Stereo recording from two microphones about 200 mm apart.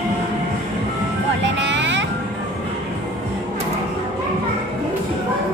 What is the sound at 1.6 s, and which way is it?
Vehicle, 65° right (ahead or behind).